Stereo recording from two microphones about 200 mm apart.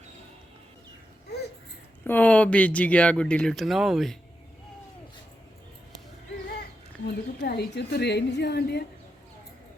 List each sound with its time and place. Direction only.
2.0 s speech: 10° left (ahead or behind)
7.4 s a woman's voice: 55° left (ahead or behind)